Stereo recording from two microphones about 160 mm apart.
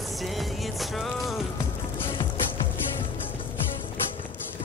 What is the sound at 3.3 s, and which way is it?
Music, 30° left (ahead or behind).